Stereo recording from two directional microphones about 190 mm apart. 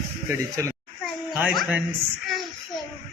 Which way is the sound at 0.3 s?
15° right (ahead or behind).